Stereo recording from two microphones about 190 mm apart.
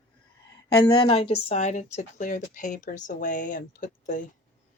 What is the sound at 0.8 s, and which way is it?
Speech, 30° left (ahead or behind).